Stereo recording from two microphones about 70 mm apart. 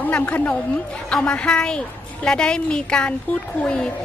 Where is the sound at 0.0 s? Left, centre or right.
Left.